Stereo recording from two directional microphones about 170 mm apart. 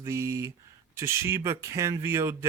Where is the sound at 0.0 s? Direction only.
15° right (ahead or behind).